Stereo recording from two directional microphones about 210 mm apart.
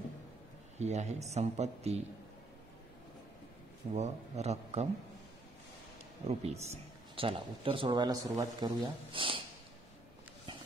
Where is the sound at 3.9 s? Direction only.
30° right (ahead or behind).